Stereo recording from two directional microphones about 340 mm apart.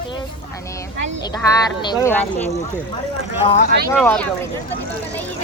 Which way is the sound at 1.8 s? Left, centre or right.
Centre.